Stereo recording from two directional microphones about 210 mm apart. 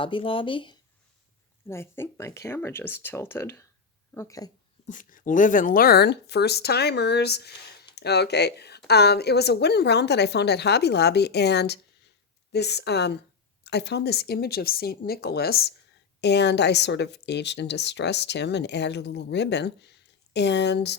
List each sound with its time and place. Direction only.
0.0 s speech: 25° left (ahead or behind)
1.6 s speech: 10° left (ahead or behind)
4.9 s a woman's voice: 40° left (ahead or behind)